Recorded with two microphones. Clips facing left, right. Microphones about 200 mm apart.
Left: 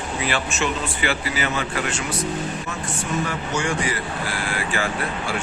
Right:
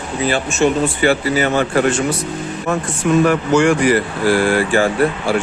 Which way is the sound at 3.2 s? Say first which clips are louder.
Right 13 dB; 75° right (ahead or behind).